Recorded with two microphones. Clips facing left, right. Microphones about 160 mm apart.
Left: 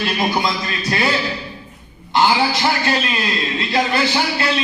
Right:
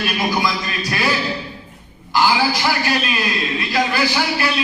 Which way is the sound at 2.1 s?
25° left (ahead or behind).